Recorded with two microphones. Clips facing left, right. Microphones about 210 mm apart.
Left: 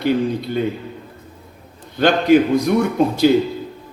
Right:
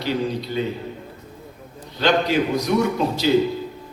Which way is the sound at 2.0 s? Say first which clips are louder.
Left 6 dB; 55° left (ahead or behind).